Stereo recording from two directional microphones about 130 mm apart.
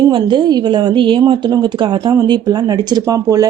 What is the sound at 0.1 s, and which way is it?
A woman's voice, 35° right (ahead or behind).